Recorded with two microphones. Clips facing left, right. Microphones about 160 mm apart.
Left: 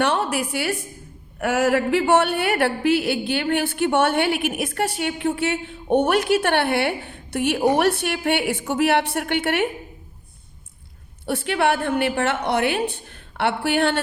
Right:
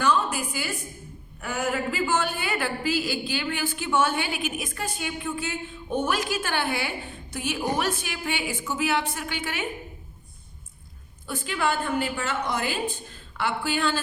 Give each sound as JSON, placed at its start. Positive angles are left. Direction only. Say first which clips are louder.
{"t": 0.0, "sound": "a woman's voice", "louder": "left 3 dB", "side_deg": 70}
{"t": 11.3, "sound": "a woman's voice", "louder": "left 6 dB", "side_deg": 70}